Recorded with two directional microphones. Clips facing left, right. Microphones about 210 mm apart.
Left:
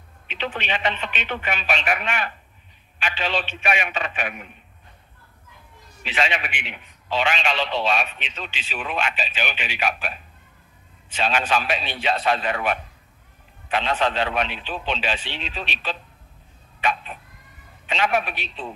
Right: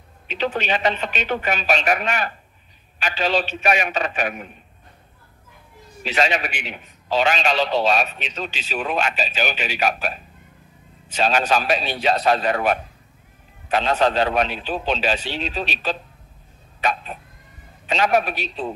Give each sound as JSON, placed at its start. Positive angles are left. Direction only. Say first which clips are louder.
{"t": 0.3, "sound": "a man's voice", "louder": "right 5 dB", "side_deg": -40}
{"t": 6.0, "sound": "a man's voice", "louder": "right 4 dB", "side_deg": -40}